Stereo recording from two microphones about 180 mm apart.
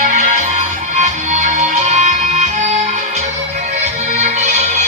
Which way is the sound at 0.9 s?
45° right (ahead or behind).